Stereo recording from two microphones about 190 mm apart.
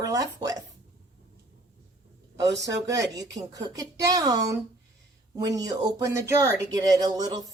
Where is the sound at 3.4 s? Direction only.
20° right (ahead or behind).